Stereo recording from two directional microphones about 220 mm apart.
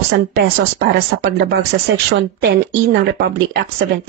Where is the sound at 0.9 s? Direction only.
45° right (ahead or behind).